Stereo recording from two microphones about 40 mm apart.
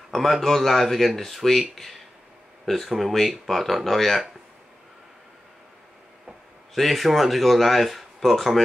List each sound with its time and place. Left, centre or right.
0.1 s speech: centre
6.7 s speech: centre